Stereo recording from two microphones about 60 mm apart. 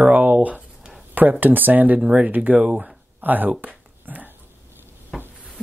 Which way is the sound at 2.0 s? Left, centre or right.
Centre.